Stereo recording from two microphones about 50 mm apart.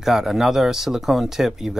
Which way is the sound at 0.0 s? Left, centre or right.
Centre.